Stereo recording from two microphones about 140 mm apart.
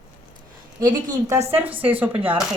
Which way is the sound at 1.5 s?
10° right (ahead or behind).